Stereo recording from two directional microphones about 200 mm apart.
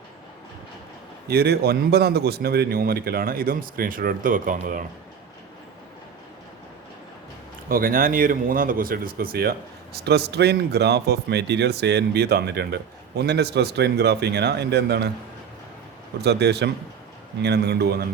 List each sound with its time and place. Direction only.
1.3 s a man's voice: 50° right (ahead or behind)
7.7 s speech: 45° right (ahead or behind)
16.2 s a man's voice: 55° right (ahead or behind)